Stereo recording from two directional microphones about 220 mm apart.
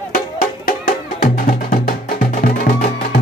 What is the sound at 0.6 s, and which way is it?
Music, 40° left (ahead or behind).